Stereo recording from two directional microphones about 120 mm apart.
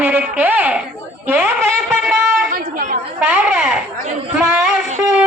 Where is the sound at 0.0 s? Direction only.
10° right (ahead or behind).